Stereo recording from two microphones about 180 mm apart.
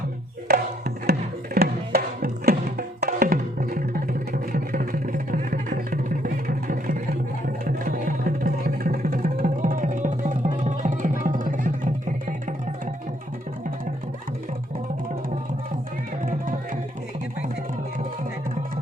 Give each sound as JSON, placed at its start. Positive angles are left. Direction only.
{"t": 0.4, "sound": "music", "side_deg": -60}